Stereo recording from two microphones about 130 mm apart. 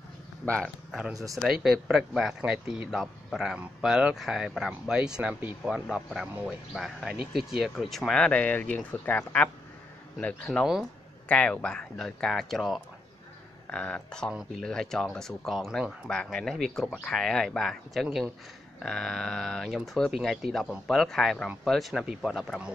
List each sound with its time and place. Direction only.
1.1 s speech: 25° right (ahead or behind)
1.4 s speech: 5° right (ahead or behind)
6.7 s speech: centre (ahead or behind)